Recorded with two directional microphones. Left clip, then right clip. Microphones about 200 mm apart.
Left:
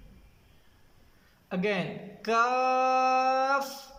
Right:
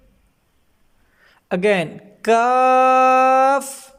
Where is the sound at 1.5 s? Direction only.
50° right (ahead or behind).